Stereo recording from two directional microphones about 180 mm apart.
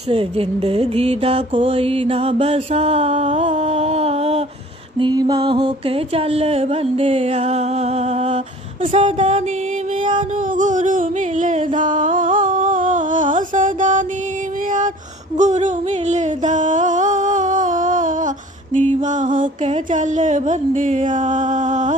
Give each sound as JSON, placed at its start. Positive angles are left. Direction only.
{"t": 0.1, "sound": "mantra", "side_deg": -30}
{"t": 4.9, "sound": "mantra", "side_deg": -25}
{"t": 10.6, "sound": "music", "side_deg": -45}
{"t": 15.3, "sound": "a sound", "side_deg": -40}
{"t": 18.8, "sound": "mantra", "side_deg": -40}